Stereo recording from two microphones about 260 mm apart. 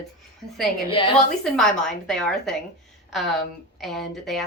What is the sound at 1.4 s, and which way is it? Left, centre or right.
Speech, centre.